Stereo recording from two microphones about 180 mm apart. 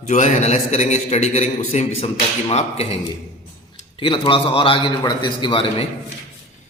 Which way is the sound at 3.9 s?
25° left (ahead or behind).